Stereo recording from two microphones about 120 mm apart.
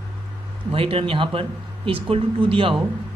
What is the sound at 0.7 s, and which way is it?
A man's voice, 50° right (ahead or behind).